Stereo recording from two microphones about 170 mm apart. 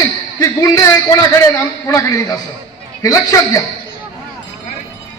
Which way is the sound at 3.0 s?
20° left (ahead or behind).